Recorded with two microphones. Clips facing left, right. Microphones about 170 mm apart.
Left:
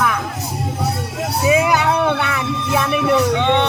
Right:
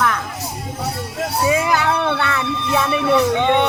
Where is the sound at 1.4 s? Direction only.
15° left (ahead or behind).